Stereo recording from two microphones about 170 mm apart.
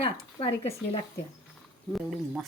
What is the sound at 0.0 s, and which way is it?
Speech, 35° left (ahead or behind).